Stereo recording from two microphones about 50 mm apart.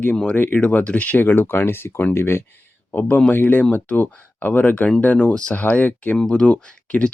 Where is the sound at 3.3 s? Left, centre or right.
Left.